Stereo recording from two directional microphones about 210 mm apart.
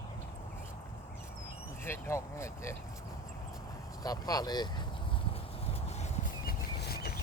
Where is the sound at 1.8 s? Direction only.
10° left (ahead or behind).